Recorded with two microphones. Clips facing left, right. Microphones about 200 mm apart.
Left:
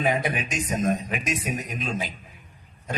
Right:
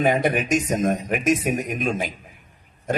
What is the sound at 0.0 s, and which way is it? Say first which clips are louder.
A man's voice: right 5 dB; 45° right (ahead or behind).